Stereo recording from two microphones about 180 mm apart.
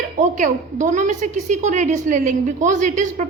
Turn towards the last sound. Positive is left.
turn(degrees=-45)  # may be behind; listen again after turning